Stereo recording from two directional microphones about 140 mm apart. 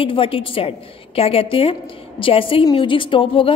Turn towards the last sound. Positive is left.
turn(degrees=40)  # may be behind; listen again after turning